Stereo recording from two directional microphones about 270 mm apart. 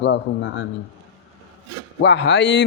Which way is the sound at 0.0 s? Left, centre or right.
Left.